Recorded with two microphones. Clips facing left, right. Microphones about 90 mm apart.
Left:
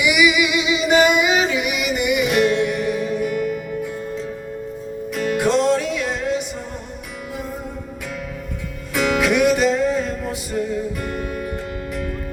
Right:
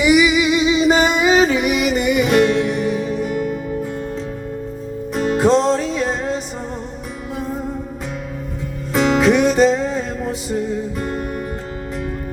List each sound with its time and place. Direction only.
0.0 s music: 35° right (ahead or behind)
5.1 s music: 30° right (ahead or behind)
8.9 s music: 30° right (ahead or behind)